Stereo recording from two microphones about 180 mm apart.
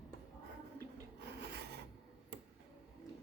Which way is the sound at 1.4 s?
65° right (ahead or behind).